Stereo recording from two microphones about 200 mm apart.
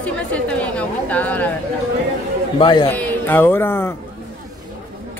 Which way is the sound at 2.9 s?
10° left (ahead or behind).